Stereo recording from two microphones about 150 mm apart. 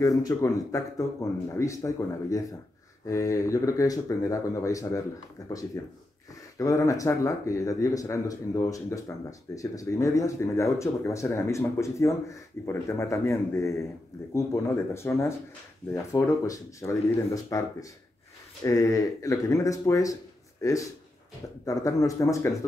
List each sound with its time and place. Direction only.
0.0 s speech: 25° left (ahead or behind)
6.6 s speech: 20° left (ahead or behind)